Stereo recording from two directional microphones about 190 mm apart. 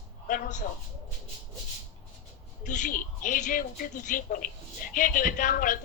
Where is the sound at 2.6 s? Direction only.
40° left (ahead or behind).